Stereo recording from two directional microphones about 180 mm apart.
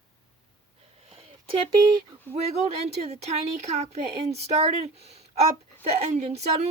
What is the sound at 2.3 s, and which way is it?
Speech, 35° right (ahead or behind).